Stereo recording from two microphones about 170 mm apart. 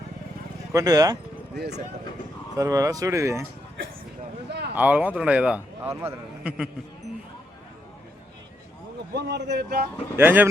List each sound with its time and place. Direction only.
0.7 s speech: 20° right (ahead or behind)
1.5 s speech: 75° right (ahead or behind)
2.6 s speech: 20° right (ahead or behind)
4.4 s a sound: 80° right
4.7 s a man's voice: 10° right (ahead or behind)
9.1 s speech: 85° right
10.2 s a man's voice: 10° right (ahead or behind)